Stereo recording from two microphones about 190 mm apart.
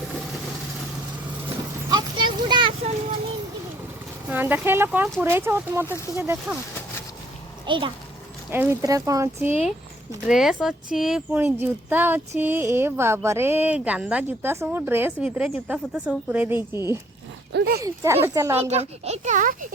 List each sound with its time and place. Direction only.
1.9 s a sound: 20° right (ahead or behind)
4.3 s speech: 10° right (ahead or behind)
5.8 s speech: 15° left (ahead or behind)
6.1 s speech: 10° right (ahead or behind)
7.6 s a child's voice: 25° right (ahead or behind)
8.4 s speech: 15° right (ahead or behind)
10.2 s speech: centre (ahead or behind)
17.5 s speech: 60° right (ahead or behind)
17.8 s speech: 15° right (ahead or behind)
18.6 s a child's voice: 35° right (ahead or behind)